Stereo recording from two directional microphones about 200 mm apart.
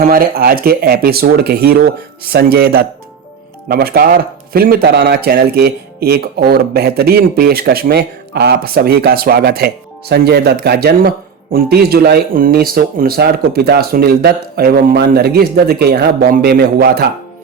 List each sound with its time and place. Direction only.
0.1 s speech: 50° right (ahead or behind)